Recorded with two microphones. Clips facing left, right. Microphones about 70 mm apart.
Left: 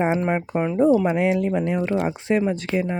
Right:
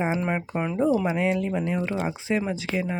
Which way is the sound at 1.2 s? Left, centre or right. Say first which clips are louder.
Left 4 dB; left.